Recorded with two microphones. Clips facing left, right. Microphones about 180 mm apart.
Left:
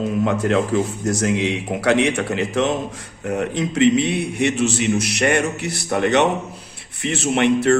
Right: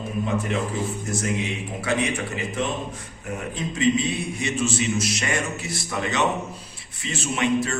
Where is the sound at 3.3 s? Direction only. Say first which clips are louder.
Left 8 dB; 75° left (ahead or behind).